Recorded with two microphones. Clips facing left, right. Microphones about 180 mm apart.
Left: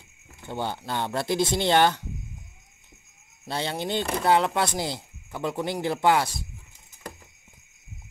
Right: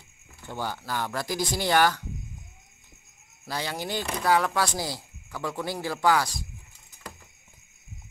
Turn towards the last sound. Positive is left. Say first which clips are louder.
# left 2 dB
turn(degrees=25)  # may be behind; listen again after turning